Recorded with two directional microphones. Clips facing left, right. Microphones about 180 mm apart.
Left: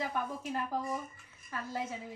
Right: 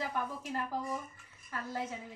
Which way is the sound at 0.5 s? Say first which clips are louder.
Left 1 dB; 15° left (ahead or behind).